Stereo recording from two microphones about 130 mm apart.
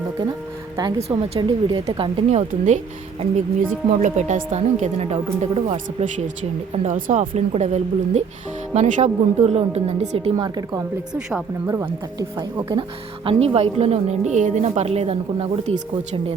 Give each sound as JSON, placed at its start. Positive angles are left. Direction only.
{"t": 0.8, "sound": "speech", "side_deg": -30}
{"t": 2.3, "sound": "a woman's voice", "side_deg": -70}
{"t": 6.0, "sound": "a woman's voice", "side_deg": -70}
{"t": 12.4, "sound": "speech", "side_deg": -35}
{"t": 13.2, "sound": "speech", "side_deg": -50}